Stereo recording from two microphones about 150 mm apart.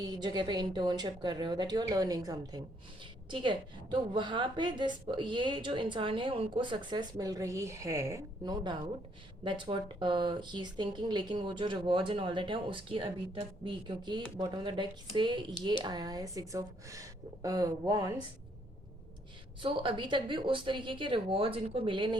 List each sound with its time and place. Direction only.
0.0 s a woman's voice: 25° right (ahead or behind)
9.4 s a woman's voice: 35° right (ahead or behind)
19.6 s a woman's voice: 35° right (ahead or behind)